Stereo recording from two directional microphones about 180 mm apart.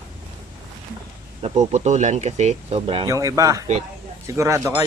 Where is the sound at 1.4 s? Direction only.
35° right (ahead or behind).